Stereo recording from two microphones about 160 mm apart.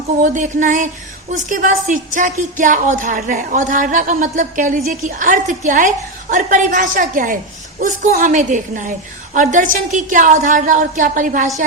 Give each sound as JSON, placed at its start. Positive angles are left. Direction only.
{"t": 0.2, "sound": "a woman's voice", "side_deg": -55}